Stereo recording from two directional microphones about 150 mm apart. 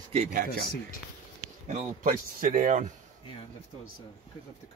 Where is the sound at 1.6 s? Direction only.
55° right (ahead or behind).